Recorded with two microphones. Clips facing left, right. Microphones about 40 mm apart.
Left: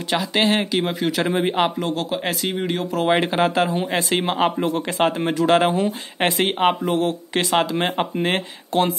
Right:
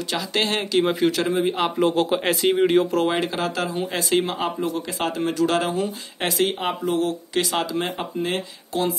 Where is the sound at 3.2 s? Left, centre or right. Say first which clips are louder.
Left 5 dB; left.